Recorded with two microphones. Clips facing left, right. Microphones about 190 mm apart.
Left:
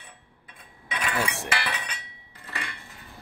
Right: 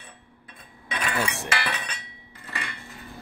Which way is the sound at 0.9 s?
10° left (ahead or behind).